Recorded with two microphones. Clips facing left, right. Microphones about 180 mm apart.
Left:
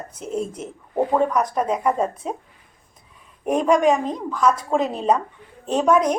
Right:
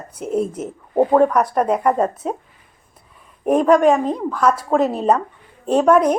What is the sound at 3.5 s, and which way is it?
Speech, 45° right (ahead or behind).